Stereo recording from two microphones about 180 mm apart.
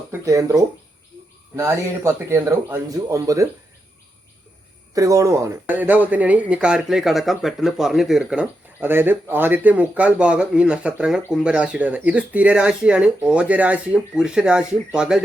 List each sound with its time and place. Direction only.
0.1 s speech: 20° right (ahead or behind)
4.9 s speech: 20° right (ahead or behind)